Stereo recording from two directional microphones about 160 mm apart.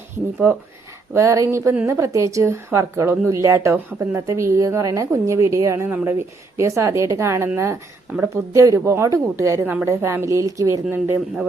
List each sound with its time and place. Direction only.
1.1 s speech: 20° right (ahead or behind)